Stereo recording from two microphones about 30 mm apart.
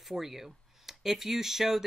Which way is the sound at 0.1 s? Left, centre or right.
Centre.